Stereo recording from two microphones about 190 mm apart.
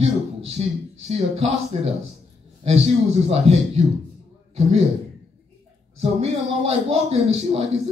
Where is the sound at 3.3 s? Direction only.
35° right (ahead or behind).